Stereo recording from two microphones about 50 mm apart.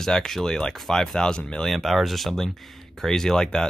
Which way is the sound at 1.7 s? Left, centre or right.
Centre.